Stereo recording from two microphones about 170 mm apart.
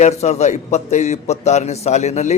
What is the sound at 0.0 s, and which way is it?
A man's voice, 40° left (ahead or behind).